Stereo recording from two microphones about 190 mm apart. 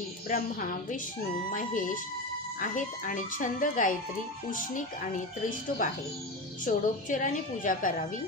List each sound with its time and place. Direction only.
0.3 s a woman's voice: 45° left (ahead or behind)
6.6 s a woman's voice: 45° left (ahead or behind)